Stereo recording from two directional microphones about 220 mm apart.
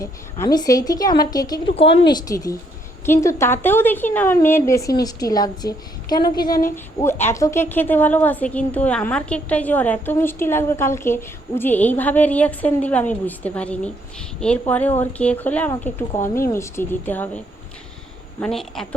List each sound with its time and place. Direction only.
0.0 s a woman's voice: 15° left (ahead or behind)